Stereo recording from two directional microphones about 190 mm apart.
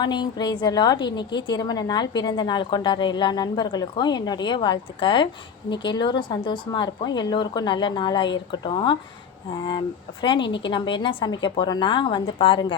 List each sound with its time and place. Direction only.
0.0 s a woman's voice: 25° left (ahead or behind)